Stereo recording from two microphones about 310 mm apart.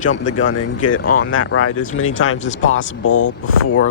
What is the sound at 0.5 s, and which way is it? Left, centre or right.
Speech, left.